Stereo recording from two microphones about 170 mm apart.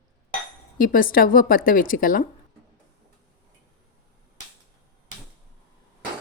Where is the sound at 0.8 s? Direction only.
55° left (ahead or behind).